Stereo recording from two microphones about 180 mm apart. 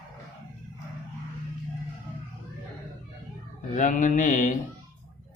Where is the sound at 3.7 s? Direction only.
45° left (ahead or behind).